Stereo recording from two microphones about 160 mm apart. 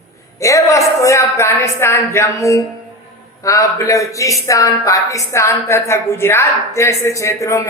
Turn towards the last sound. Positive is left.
turn(degrees=20)  # may be behind; listen again after turning